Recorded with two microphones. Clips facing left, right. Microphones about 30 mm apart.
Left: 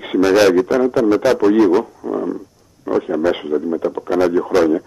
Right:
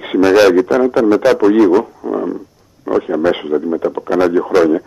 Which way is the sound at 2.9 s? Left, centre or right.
Centre.